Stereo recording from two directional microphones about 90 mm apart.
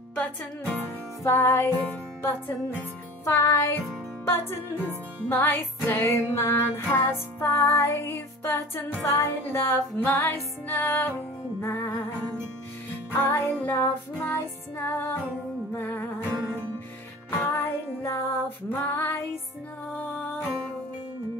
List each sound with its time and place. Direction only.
0.1 s music: 15° left (ahead or behind)
1.2 s music: 30° left (ahead or behind)
3.3 s music: 30° left (ahead or behind)
13.2 s music: 25° left (ahead or behind)
16.3 s music: 35° right (ahead or behind)
17.5 s music: 25° left (ahead or behind)